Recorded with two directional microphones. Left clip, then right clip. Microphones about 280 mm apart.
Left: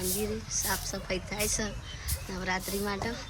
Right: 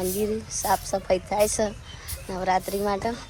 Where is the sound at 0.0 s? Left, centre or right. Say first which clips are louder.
Right 7 dB; centre.